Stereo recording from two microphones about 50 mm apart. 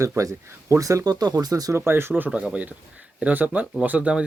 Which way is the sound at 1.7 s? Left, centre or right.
Right.